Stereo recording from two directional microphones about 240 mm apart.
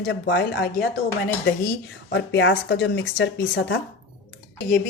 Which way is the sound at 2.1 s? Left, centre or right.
Left.